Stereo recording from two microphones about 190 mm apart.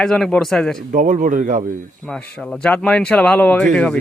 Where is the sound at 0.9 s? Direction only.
40° right (ahead or behind).